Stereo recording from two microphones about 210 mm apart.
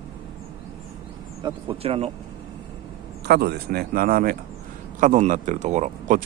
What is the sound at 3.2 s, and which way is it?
Speech, 50° right (ahead or behind).